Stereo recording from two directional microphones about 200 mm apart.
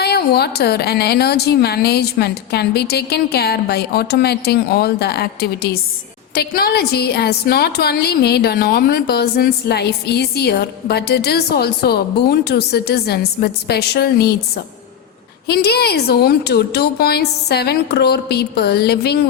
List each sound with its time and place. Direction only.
0.0 s a woman's voice: 55° left (ahead or behind)